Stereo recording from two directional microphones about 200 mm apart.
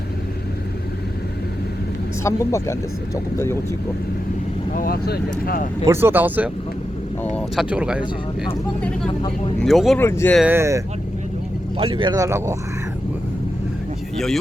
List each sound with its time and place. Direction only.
2.2 s speech: 15° left (ahead or behind)
4.7 s speech: 45° left (ahead or behind)
5.8 s speech: 10° right (ahead or behind)
7.3 s speech: centre (ahead or behind)
9.6 s speech: centre (ahead or behind)
10.0 s speech: 10° left (ahead or behind)
10.3 s speech: 10° right (ahead or behind)
11.8 s speech: 25° right (ahead or behind)